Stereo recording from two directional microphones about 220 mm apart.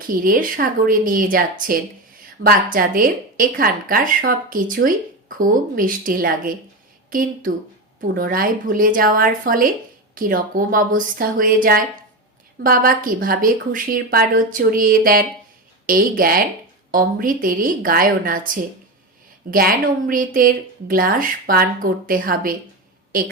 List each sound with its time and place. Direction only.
0.0 s a woman's voice: 40° right (ahead or behind)